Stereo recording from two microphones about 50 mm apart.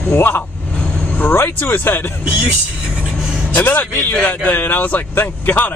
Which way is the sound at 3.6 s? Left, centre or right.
Left.